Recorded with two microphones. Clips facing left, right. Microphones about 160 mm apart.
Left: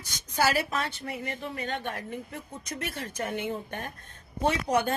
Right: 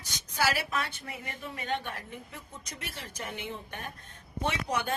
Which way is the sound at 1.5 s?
50° left (ahead or behind).